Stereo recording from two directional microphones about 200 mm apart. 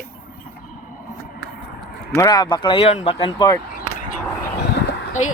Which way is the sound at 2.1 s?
20° left (ahead or behind).